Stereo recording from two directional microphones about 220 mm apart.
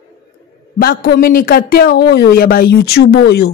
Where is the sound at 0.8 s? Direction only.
45° left (ahead or behind).